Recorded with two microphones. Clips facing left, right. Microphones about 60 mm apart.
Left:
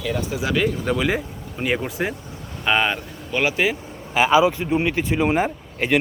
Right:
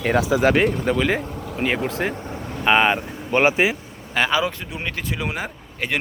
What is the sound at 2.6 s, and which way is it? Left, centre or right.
Speech, right.